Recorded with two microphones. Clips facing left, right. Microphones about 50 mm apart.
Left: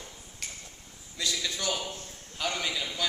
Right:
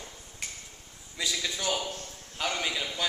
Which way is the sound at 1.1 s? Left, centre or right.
Centre.